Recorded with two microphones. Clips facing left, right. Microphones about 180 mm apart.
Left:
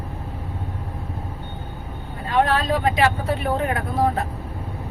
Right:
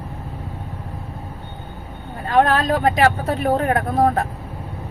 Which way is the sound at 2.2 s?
50° right (ahead or behind).